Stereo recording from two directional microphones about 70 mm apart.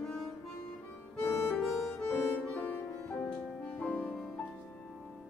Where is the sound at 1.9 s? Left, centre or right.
Left.